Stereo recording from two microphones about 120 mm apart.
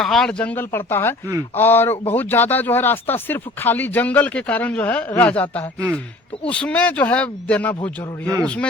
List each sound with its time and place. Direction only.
0.0 s speech: 5° left (ahead or behind)